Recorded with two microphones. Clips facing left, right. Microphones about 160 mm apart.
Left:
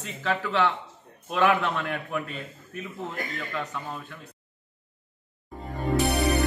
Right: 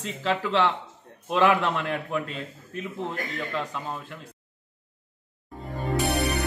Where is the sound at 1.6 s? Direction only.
30° right (ahead or behind).